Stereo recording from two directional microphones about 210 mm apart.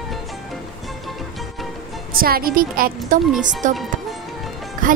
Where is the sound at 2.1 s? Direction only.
45° right (ahead or behind).